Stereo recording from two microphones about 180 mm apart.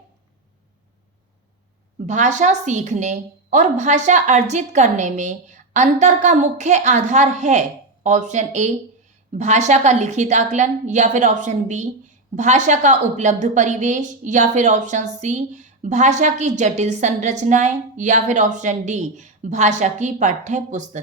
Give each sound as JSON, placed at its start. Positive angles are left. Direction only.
{"t": 2.0, "sound": "a woman's voice", "side_deg": -40}